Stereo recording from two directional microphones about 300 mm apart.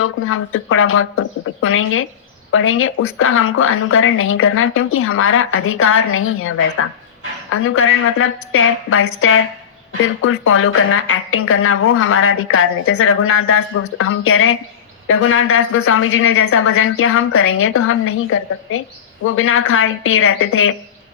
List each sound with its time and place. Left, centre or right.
0.0 s a woman's voice: left
19.2 s a woman's voice: left